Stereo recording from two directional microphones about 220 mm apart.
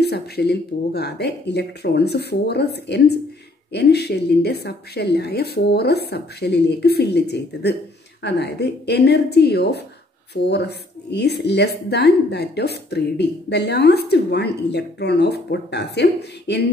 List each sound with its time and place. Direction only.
0.0 s a woman's voice: 50° left (ahead or behind)